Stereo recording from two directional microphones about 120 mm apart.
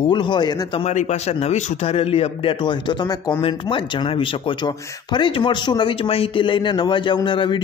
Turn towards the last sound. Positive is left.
turn(degrees=40)  # may be behind; listen again after turning